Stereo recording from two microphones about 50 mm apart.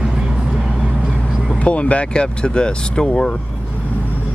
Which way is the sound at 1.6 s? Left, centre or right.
Left.